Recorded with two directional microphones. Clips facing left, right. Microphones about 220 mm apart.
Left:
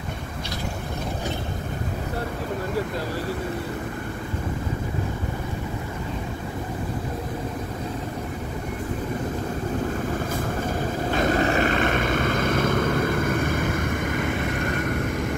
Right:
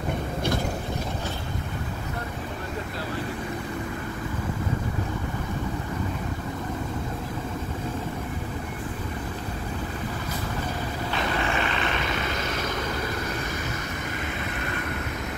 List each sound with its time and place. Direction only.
11.1 s vehicle: 45° left (ahead or behind)